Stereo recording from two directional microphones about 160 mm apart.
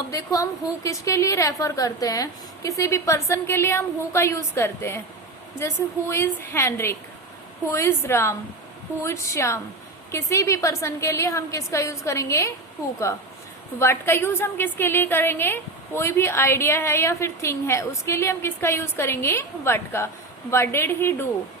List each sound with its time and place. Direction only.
0.1 s a woman's voice: 20° left (ahead or behind)
13.7 s a woman's voice: 15° left (ahead or behind)